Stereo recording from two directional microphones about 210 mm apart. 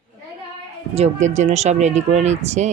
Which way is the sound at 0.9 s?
30° right (ahead or behind).